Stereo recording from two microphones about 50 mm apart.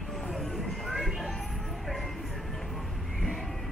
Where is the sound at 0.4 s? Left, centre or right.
Centre.